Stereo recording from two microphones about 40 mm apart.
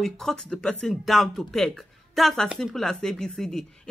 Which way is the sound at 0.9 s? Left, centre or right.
Centre.